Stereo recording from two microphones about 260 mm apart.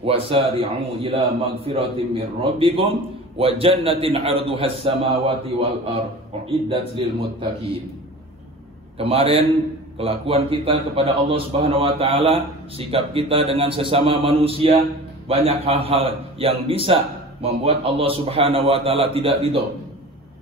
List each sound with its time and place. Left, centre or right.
0.0 s a man's voice: right
8.9 s a man's voice: right